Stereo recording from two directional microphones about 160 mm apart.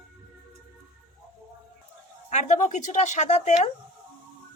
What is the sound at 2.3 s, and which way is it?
Speech, 45° left (ahead or behind).